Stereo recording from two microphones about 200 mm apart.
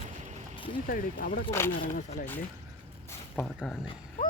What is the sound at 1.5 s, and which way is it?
Speech, 10° left (ahead or behind).